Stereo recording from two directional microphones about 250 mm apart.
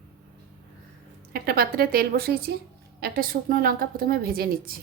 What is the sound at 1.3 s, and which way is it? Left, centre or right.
A woman's voice, right.